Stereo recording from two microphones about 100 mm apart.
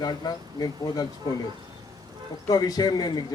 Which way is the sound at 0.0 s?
40° left (ahead or behind).